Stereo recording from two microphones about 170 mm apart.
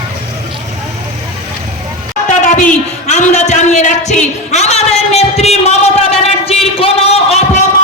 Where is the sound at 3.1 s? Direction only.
40° left (ahead or behind).